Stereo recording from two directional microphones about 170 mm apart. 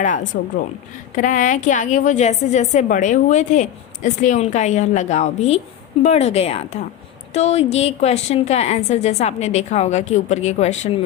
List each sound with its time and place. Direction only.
0.0 s a woman's voice: 50° left (ahead or behind)